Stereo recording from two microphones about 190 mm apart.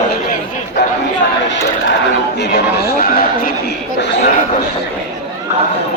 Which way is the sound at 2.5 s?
55° left (ahead or behind).